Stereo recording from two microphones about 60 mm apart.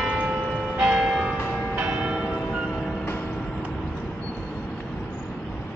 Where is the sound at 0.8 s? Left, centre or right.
Centre.